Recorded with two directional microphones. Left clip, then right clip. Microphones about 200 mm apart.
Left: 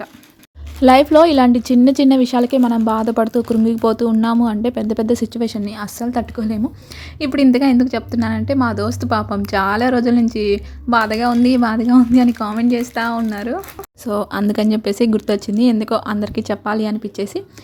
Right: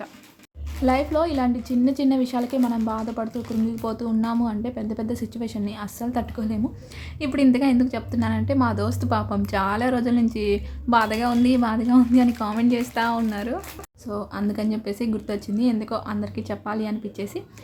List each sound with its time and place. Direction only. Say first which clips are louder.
0.8 s a woman's voice: left 12 dB; 45° left (ahead or behind)
2.8 s a woman's voice: left 11 dB; 40° left (ahead or behind); by 13.6 s 25° left (ahead or behind)
13.6 s a woman's voice: left 7 dB; 40° left (ahead or behind)